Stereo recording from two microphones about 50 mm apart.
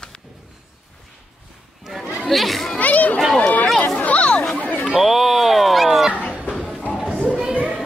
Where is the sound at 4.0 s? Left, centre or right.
Left.